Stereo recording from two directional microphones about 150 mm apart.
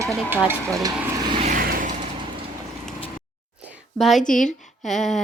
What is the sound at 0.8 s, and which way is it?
Vehicle, 25° right (ahead or behind).